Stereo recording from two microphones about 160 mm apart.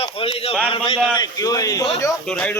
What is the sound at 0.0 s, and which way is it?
Speech, 35° left (ahead or behind).